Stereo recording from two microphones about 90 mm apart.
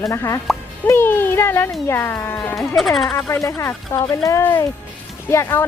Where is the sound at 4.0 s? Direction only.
50° left (ahead or behind).